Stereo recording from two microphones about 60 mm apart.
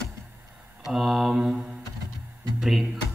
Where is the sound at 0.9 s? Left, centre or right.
Centre.